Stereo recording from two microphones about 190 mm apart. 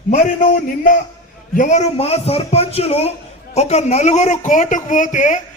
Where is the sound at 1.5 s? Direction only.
40° left (ahead or behind).